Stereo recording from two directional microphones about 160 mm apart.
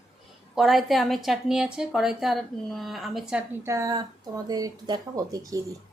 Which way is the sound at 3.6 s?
20° right (ahead or behind).